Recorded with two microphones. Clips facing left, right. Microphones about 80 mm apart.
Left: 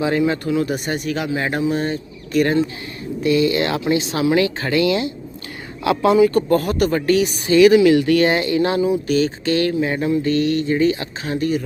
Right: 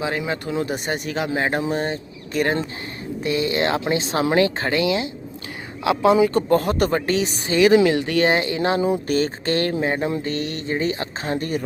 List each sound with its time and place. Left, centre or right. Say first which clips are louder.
0.0 s speech: left 6 dB; centre
0.5 s speech: left 3 dB; right
4.8 s speech: left 6 dB; centre
8.9 s speech: left 3 dB; right